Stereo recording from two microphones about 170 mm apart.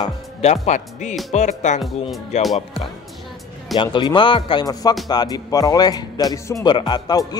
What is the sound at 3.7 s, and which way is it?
A man's voice, 25° left (ahead or behind).